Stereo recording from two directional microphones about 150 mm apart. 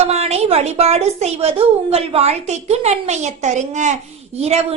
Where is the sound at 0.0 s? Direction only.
45° right (ahead or behind).